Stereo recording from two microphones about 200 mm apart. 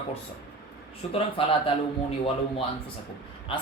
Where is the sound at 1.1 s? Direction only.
25° left (ahead or behind).